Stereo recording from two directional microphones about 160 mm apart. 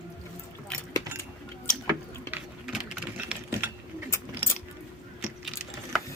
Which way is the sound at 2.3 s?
5° right (ahead or behind).